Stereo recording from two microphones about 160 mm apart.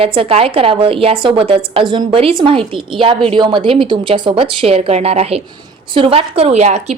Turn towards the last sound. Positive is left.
turn(degrees=-45)  # may be behind; listen again after turning